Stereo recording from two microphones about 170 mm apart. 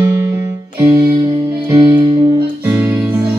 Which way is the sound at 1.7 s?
20° right (ahead or behind).